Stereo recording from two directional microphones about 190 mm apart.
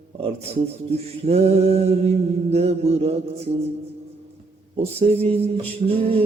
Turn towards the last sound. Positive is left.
turn(degrees=-30)  # may be behind; listen again after turning